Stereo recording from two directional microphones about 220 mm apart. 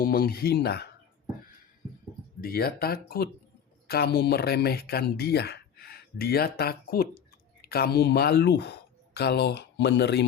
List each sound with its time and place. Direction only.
0.0 s speech: 40° left (ahead or behind)
2.4 s speech: 45° left (ahead or behind)